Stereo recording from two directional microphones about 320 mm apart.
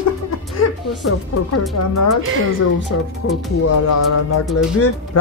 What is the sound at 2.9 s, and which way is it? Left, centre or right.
Speech, left.